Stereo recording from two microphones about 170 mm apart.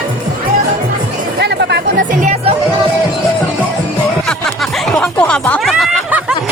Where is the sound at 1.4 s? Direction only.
80° right.